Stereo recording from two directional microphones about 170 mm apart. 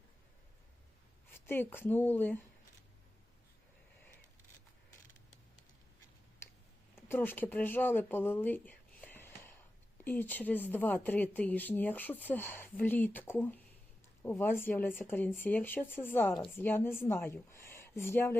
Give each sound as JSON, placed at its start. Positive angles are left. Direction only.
{"t": 1.3, "sound": "speech", "side_deg": 10}
{"t": 6.9, "sound": "a woman's voice", "side_deg": 10}